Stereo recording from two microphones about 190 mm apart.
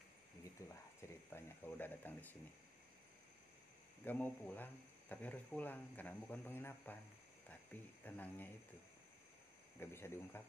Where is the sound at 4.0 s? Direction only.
10° left (ahead or behind).